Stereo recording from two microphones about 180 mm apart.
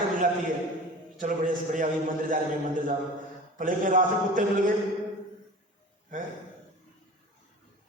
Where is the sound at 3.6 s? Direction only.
50° right (ahead or behind).